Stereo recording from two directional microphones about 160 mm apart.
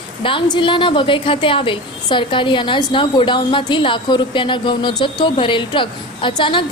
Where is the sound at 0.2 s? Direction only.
35° left (ahead or behind).